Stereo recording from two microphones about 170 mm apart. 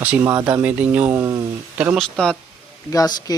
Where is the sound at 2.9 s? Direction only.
20° left (ahead or behind).